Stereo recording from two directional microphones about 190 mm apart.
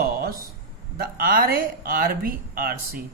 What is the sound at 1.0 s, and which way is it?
Speech, 50° right (ahead or behind).